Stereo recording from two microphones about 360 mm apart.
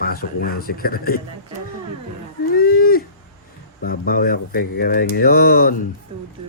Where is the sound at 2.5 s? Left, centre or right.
Left.